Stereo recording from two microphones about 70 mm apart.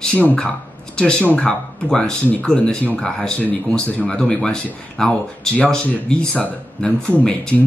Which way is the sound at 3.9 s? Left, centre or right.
Centre.